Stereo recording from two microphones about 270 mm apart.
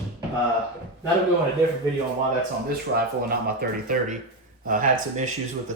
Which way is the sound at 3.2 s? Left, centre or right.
Right.